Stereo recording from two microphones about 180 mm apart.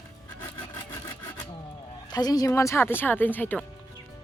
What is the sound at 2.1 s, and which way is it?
Speech, 20° left (ahead or behind).